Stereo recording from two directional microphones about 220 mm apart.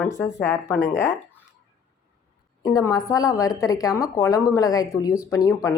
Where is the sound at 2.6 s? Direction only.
15° left (ahead or behind).